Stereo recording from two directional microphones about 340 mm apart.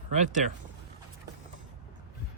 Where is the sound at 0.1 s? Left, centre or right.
Right.